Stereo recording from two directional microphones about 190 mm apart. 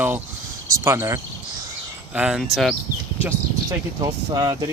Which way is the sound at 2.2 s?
5° right (ahead or behind).